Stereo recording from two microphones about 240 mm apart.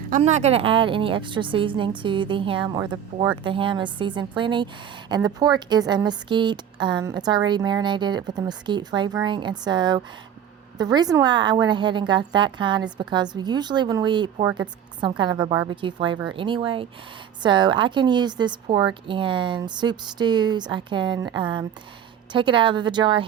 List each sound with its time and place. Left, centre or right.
0.1 s a woman's voice: right